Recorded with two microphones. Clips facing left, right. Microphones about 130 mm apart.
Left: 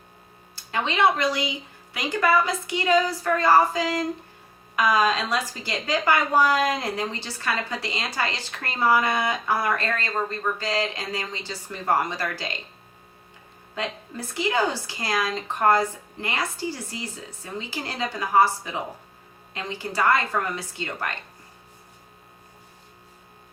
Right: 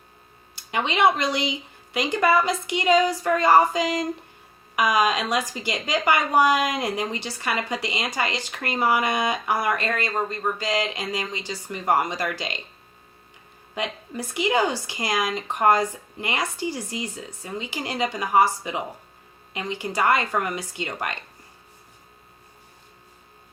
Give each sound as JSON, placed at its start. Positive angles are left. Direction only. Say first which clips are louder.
{"t": 0.5, "sound": "a woman's voice", "louder": "right 1 dB", "side_deg": -15}
{"t": 13.7, "sound": "speech", "louder": "right 2 dB", "side_deg": -15}